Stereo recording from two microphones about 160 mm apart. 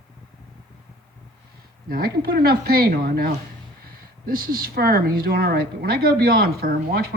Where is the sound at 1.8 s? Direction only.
70° right (ahead or behind).